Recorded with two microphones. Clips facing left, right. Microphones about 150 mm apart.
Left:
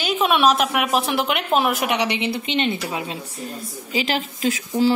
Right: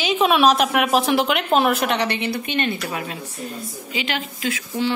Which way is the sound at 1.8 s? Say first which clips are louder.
Even; 15° left (ahead or behind).